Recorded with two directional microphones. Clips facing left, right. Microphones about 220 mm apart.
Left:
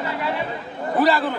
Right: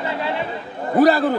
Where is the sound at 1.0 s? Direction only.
45° right (ahead or behind).